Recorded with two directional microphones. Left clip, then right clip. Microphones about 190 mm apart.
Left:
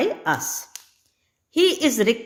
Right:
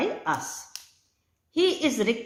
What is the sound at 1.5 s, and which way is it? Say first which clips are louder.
Speech: left 5 dB; 45° left (ahead or behind).